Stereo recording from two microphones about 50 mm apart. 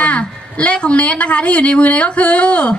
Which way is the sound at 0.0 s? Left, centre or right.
Left.